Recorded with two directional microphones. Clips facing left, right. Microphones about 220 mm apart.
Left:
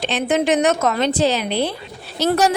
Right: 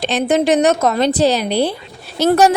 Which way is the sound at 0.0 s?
40° right (ahead or behind).